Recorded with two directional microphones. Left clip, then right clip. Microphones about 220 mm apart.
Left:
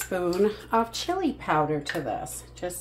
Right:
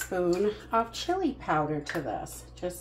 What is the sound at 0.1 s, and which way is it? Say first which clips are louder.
A woman's voice: left 3 dB; 45° left (ahead or behind).